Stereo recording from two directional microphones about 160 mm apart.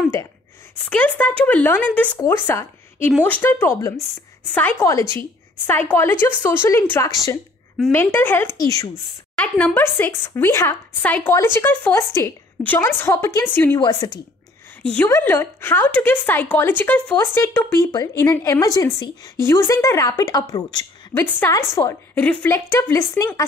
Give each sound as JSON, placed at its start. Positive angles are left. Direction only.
{"t": 0.8, "sound": "a woman's voice", "side_deg": 10}
{"t": 9.8, "sound": "a woman's voice", "side_deg": 10}
{"t": 14.8, "sound": "a woman's voice", "side_deg": 5}